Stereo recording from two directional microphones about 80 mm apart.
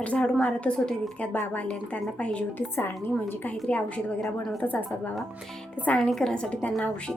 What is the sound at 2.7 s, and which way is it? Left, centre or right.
Speech, left.